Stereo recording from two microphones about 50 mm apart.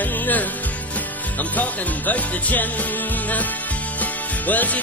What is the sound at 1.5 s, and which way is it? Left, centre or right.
Music, left.